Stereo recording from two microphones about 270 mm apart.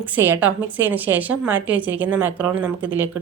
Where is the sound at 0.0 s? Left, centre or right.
Centre.